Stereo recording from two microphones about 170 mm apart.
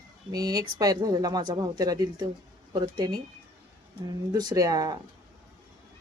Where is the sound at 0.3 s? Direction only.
20° right (ahead or behind).